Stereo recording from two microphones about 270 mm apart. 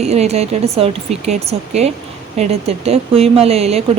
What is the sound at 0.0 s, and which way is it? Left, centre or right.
A woman's voice, right.